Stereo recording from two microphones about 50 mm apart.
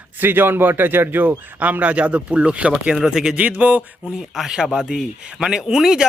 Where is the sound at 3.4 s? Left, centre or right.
Right.